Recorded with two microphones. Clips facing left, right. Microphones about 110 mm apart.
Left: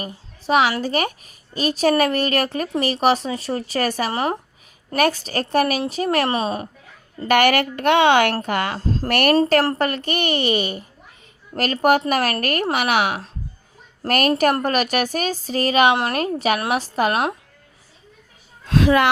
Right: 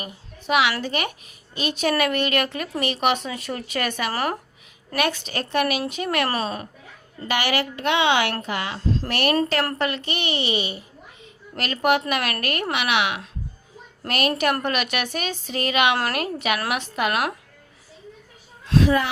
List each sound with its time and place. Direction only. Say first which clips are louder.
0.0 s a woman's voice: left 4 dB; 35° left (ahead or behind)
4.1 s speech: left 3 dB; 25° left (ahead or behind)
4.9 s a woman's voice: left 5 dB; 40° left (ahead or behind)
7.3 s a woman's voice: left 7 dB; 55° left (ahead or behind); by 17.3 s 30° left (ahead or behind)
18.6 s a sound: left 1 dB; 50° left (ahead or behind)